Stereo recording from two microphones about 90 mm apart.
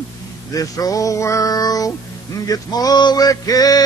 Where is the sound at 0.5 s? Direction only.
40° left (ahead or behind).